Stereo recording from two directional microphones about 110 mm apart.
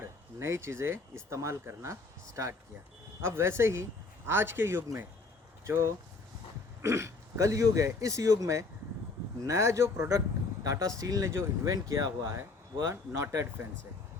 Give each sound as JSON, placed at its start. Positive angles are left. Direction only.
{"t": 0.0, "sound": "speech", "side_deg": -25}